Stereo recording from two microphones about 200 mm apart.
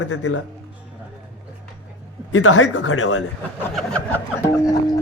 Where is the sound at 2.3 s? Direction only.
90° left.